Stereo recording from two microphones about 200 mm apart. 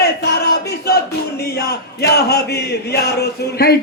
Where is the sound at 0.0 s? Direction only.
55° left (ahead or behind).